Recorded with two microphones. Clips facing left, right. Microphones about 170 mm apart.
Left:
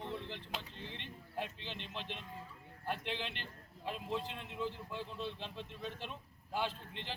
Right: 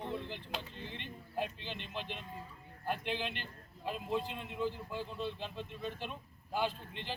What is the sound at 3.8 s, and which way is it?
A man's voice, 5° right (ahead or behind).